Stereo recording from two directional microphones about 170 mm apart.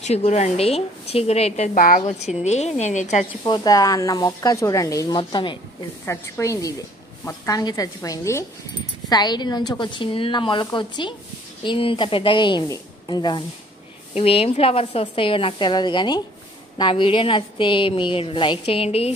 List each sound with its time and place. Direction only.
0.0 s speech: 40° left (ahead or behind)
1.8 s a woman's voice: 50° left (ahead or behind)
3.4 s speech: 25° left (ahead or behind)
6.0 s speech: 15° left (ahead or behind)
14.1 s speech: 35° left (ahead or behind)